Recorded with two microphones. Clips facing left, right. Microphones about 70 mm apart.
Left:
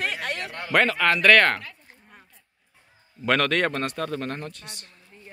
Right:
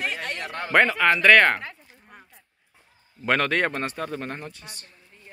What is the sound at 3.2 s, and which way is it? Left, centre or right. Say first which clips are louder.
Speech: even; right.